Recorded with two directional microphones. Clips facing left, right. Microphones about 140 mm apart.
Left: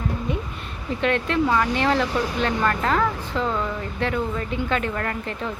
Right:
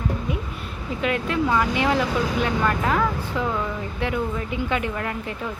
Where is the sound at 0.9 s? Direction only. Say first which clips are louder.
Left 2 dB; 5° right (ahead or behind).